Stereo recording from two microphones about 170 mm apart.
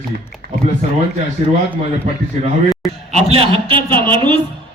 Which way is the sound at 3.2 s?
35° right (ahead or behind).